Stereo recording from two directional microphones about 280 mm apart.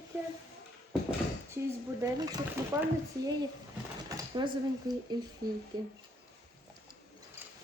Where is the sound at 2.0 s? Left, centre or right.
Centre.